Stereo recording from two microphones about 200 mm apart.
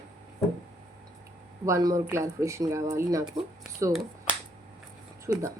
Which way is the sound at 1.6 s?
15° right (ahead or behind).